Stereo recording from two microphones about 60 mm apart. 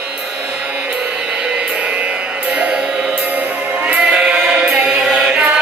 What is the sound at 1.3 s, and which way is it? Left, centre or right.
Music, centre.